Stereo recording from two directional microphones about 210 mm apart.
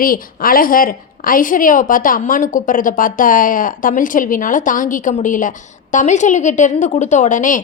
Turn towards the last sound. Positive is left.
turn(degrees=35)  # may be behind; listen again after turning